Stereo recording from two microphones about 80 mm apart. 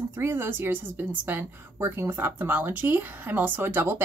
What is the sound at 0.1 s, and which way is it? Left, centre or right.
Speech, right.